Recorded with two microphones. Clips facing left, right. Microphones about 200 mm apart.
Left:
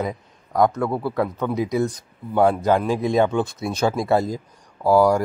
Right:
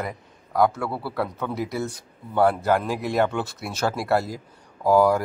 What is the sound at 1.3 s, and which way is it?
Speech, 15° left (ahead or behind).